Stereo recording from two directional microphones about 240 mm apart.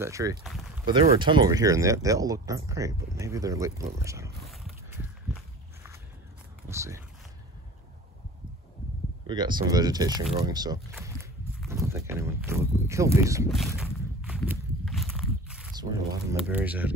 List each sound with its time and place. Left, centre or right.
0.0 s speech: centre
6.7 s speech: centre
9.3 s speech: centre
13.5 s a sound: centre
15.8 s speech: centre